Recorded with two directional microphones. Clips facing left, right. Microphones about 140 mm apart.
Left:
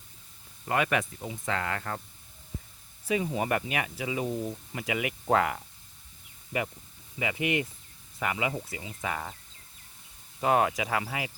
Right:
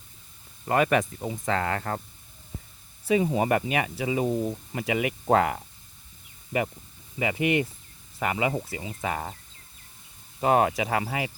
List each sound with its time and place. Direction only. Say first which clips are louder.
0.7 s speech: right 5 dB; 40° right (ahead or behind)
3.1 s speech: right 5 dB; 30° right (ahead or behind)
10.4 s speech: right 3 dB; 30° right (ahead or behind)